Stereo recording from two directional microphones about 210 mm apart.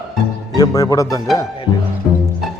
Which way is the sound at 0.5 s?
15° left (ahead or behind).